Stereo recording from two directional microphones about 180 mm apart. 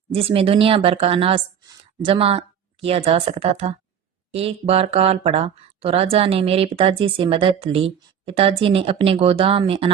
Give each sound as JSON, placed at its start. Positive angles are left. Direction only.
{"t": 0.1, "sound": "speech", "side_deg": -30}